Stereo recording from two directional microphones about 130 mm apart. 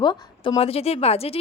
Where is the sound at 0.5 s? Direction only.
50° left (ahead or behind).